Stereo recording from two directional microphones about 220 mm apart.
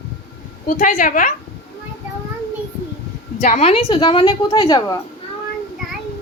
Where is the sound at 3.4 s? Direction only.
35° left (ahead or behind).